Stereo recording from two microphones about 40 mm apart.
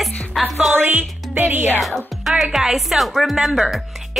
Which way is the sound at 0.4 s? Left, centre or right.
Centre.